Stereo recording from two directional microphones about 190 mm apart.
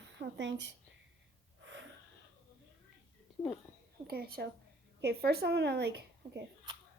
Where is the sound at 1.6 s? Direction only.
75° right (ahead or behind).